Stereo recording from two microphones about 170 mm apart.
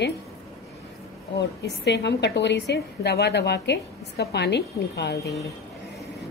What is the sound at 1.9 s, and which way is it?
A woman's voice, 90° left.